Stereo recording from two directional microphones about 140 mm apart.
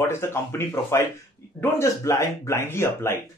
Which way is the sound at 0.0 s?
20° left (ahead or behind).